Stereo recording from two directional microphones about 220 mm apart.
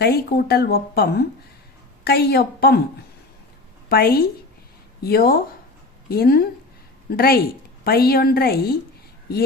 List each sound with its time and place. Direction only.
0.0 s speech: 45° left (ahead or behind)
3.8 s speech: 45° left (ahead or behind)